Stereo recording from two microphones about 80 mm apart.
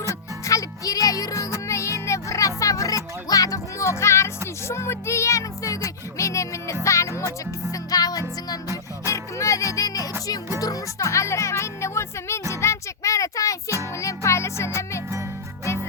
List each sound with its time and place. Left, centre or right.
0.1 s music: left
7.7 s music: left
9.0 s music: left